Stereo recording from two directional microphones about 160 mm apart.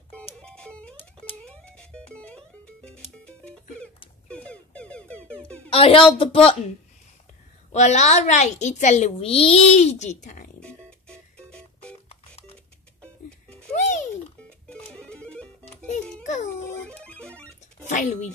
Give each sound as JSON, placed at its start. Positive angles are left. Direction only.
{"t": 0.4, "sound": "music", "side_deg": 5}
{"t": 5.7, "sound": "a woman's voice", "side_deg": 35}
{"t": 7.7, "sound": "a child's voice", "side_deg": 45}
{"t": 10.6, "sound": "music", "side_deg": 5}
{"t": 12.1, "sound": "telephone dialing", "side_deg": 40}
{"t": 13.7, "sound": "music", "side_deg": 50}
{"t": 14.7, "sound": "music", "side_deg": 5}
{"t": 15.9, "sound": "music", "side_deg": 50}
{"t": 16.8, "sound": "music", "side_deg": 5}
{"t": 17.8, "sound": "a sound", "side_deg": 45}